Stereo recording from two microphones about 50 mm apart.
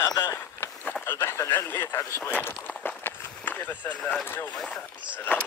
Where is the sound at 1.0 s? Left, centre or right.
Left.